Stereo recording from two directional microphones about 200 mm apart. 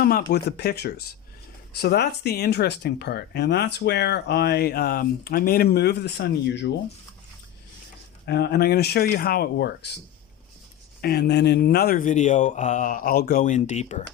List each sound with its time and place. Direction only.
0.0 s speech: 45° left (ahead or behind)
8.3 s speech: 55° left (ahead or behind)
11.0 s speech: 50° left (ahead or behind); by 14.0 s 35° left (ahead or behind)